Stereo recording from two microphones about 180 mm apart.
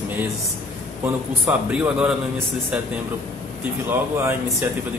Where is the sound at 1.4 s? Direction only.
5° right (ahead or behind).